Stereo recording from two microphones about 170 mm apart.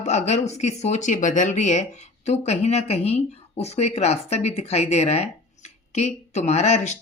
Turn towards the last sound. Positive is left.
turn(degrees=40)  # may be behind; listen again after turning